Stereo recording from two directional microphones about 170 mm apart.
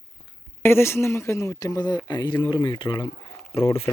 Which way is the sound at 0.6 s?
15° left (ahead or behind).